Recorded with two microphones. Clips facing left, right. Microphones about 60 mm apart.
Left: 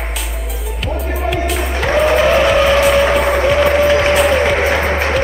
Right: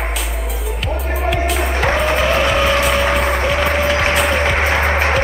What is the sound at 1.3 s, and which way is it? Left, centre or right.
Vehicle, centre.